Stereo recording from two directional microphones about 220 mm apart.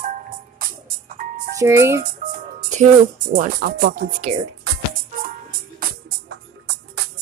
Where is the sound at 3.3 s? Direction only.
40° right (ahead or behind).